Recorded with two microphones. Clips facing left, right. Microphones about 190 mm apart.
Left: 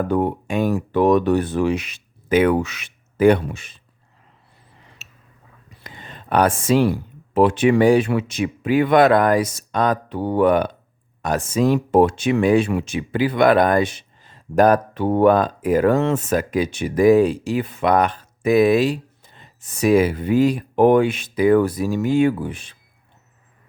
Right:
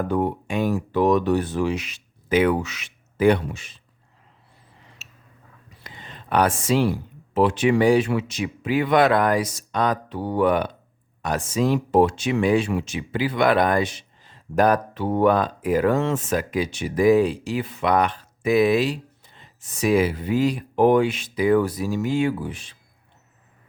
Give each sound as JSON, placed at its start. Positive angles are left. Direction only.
{"t": 0.1, "sound": "speech", "side_deg": 50}
{"t": 5.0, "sound": "chewing", "side_deg": 60}
{"t": 5.8, "sound": "a sound", "side_deg": 50}
{"t": 7.3, "sound": "speech", "side_deg": 55}